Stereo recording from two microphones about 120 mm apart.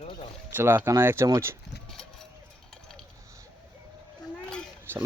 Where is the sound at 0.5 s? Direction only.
20° right (ahead or behind).